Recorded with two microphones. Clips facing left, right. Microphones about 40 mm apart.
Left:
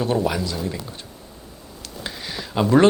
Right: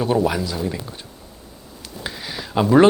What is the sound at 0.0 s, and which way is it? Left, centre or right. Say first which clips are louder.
Speech: right 2 dB; centre.